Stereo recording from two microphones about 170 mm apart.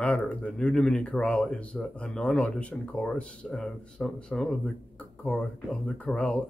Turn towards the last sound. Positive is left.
turn(degrees=5)  # may be behind; listen again after turning